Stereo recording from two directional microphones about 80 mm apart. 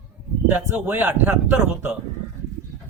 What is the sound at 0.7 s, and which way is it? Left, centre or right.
A man's voice, right.